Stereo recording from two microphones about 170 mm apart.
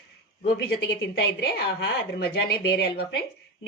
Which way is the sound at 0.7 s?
70° left (ahead or behind).